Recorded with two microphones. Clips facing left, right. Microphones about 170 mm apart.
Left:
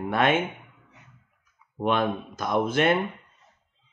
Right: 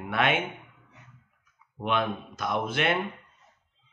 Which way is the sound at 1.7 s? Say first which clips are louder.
Left 4 dB; 40° left (ahead or behind).